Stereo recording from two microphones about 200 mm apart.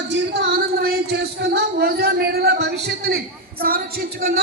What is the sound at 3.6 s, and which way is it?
Speech, 45° right (ahead or behind).